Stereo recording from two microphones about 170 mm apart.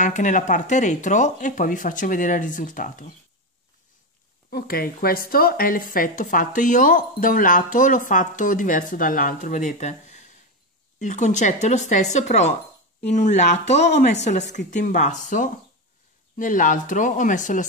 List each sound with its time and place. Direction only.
0.0 s speech: 45° left (ahead or behind)
4.5 s speech: 65° left (ahead or behind)